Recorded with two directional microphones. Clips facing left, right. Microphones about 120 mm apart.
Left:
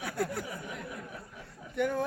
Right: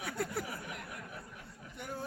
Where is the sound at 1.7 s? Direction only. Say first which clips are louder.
Left 13 dB; 75° left (ahead or behind).